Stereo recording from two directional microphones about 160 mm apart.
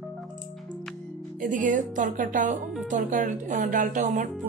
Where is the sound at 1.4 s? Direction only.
55° right (ahead or behind).